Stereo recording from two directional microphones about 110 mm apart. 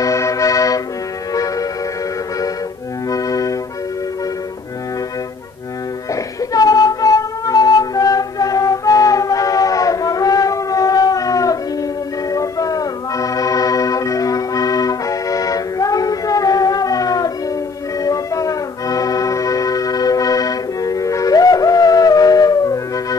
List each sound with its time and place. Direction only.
0.0 s music: 30° left (ahead or behind)
3.1 s music: 30° left (ahead or behind)
6.5 s music: 35° left (ahead or behind)